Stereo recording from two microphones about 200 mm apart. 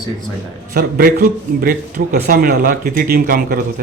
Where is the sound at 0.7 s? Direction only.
50° right (ahead or behind).